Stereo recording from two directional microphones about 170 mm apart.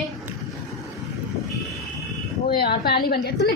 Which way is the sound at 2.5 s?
65° left (ahead or behind).